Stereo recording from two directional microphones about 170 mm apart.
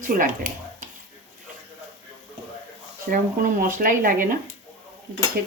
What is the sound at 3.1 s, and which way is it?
Speech, 50° right (ahead or behind).